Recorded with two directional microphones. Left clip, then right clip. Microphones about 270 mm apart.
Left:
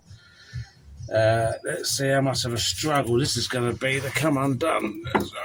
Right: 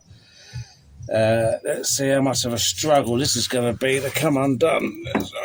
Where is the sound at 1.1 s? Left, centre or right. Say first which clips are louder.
Right 2 dB; right.